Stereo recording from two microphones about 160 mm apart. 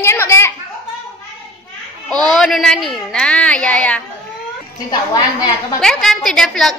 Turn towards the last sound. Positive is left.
turn(degrees=5)  # may be behind; listen again after turning